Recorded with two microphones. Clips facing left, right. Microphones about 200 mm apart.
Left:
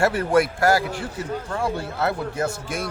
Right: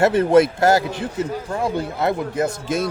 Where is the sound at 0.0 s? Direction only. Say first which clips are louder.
Right 5 dB; 20° right (ahead or behind).